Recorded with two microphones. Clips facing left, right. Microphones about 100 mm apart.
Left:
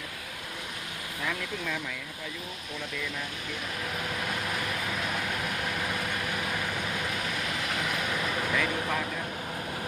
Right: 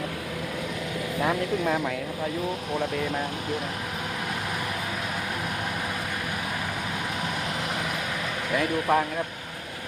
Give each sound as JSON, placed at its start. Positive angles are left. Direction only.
{"t": 1.2, "sound": "speech", "side_deg": -45}
{"t": 8.5, "sound": "speech", "side_deg": -45}